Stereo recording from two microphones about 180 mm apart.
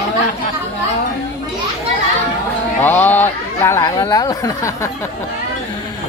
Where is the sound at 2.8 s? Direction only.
10° left (ahead or behind).